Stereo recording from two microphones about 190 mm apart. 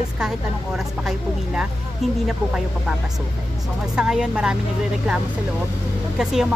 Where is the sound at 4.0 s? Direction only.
5° right (ahead or behind).